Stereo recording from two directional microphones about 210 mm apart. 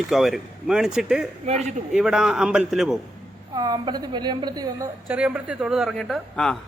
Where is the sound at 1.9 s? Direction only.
5° right (ahead or behind).